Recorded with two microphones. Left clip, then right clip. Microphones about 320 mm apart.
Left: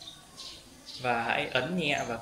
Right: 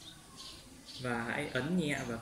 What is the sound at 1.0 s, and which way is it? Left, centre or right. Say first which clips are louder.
Speech: left 8 dB; left.